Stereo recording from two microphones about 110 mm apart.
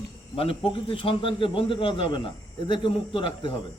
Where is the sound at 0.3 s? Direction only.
55° left (ahead or behind).